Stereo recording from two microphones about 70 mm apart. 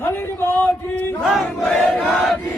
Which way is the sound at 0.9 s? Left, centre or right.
Left.